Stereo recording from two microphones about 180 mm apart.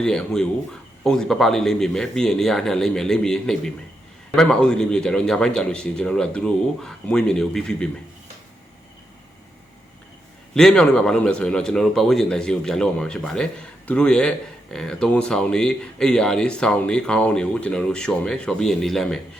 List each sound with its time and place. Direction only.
0.0 s speech: 5° left (ahead or behind)
10.5 s speech: 5° left (ahead or behind)